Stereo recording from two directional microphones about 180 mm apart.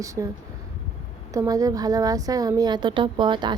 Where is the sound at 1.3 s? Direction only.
20° right (ahead or behind).